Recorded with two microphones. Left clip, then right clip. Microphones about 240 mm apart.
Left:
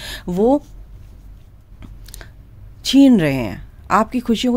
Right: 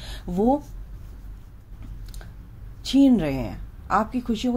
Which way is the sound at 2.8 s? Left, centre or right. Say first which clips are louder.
Left 7 dB; left.